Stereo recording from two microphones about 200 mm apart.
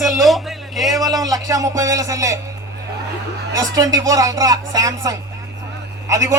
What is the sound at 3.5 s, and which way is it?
Speech, 15° right (ahead or behind).